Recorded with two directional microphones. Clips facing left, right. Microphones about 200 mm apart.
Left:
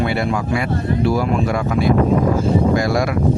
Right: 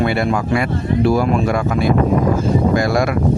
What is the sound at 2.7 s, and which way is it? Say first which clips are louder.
Speech: right 2 dB; 55° right (ahead or behind).